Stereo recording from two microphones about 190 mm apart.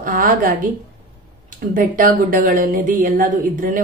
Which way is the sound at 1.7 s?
45° right (ahead or behind).